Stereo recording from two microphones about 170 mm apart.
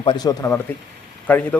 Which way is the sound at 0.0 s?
25° left (ahead or behind).